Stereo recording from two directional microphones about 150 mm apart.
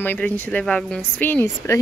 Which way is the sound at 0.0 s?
10° left (ahead or behind).